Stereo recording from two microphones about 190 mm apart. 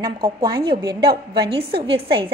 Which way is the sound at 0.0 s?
25° right (ahead or behind).